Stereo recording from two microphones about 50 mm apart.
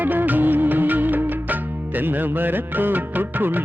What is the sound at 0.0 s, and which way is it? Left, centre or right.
Music of bollywood, right.